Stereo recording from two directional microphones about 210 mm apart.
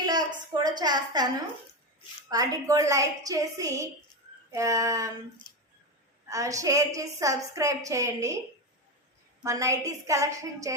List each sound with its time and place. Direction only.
0.0 s a woman's voice: 20° right (ahead or behind)
2.3 s a woman's voice: 15° right (ahead or behind)
6.2 s a woman's voice: 15° right (ahead or behind)
9.4 s a woman's voice: 15° right (ahead or behind)